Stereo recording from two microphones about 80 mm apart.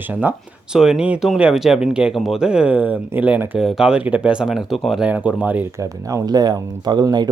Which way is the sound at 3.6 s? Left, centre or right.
Centre.